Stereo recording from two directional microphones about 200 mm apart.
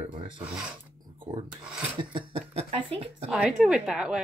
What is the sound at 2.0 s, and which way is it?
Speech, 25° right (ahead or behind).